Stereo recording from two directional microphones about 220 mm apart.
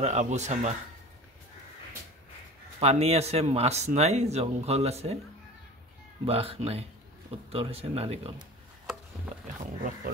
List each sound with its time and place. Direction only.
0.0 s speech: 30° right (ahead or behind)
2.8 s speech: 30° right (ahead or behind)
6.2 s speech: 25° right (ahead or behind)